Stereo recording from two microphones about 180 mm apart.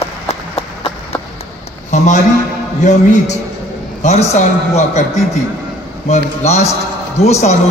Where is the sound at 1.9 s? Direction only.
40° left (ahead or behind).